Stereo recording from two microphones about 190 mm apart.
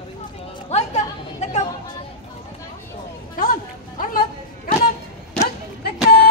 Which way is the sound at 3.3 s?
45° left (ahead or behind).